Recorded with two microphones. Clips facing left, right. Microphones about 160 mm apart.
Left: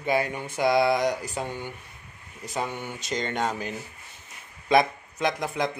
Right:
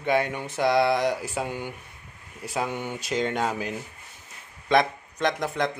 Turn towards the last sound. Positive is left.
turn(degrees=0)  # may be behind; listen again after turning